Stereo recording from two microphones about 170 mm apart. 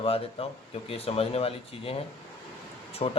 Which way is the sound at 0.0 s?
35° left (ahead or behind).